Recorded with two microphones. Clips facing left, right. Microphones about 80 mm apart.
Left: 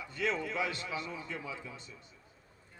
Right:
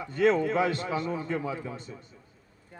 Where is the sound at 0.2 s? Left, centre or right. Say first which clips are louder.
Right 11 dB; right.